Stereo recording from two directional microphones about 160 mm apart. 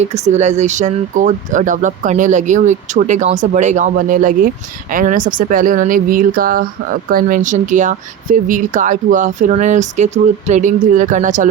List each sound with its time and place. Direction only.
0.0 s speech: 45° right (ahead or behind)